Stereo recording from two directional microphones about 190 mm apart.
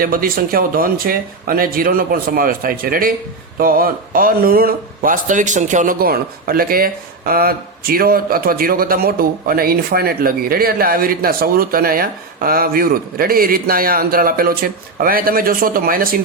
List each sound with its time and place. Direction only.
0.0 s speech: 50° right (ahead or behind)